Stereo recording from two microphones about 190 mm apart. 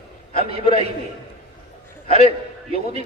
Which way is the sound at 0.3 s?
35° right (ahead or behind).